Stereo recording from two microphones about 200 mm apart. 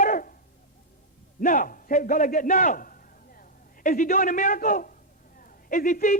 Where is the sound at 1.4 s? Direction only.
40° left (ahead or behind).